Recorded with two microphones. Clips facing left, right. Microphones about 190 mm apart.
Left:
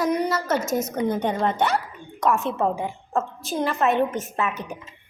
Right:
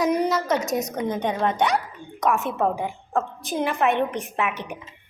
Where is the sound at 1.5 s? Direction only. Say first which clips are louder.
Even; 15° right (ahead or behind).